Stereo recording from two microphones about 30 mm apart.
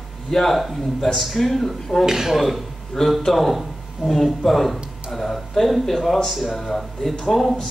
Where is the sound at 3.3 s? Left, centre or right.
Centre.